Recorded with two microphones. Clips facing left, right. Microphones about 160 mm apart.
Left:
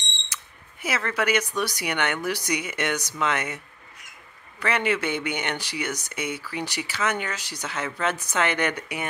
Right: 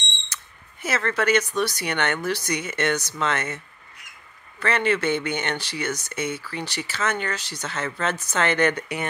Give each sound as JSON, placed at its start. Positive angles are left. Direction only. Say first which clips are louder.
{"t": 0.8, "sound": "speech", "louder": "right 2 dB", "side_deg": 10}